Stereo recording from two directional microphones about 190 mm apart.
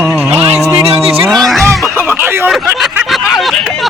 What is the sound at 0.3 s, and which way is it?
Music, 35° right (ahead or behind).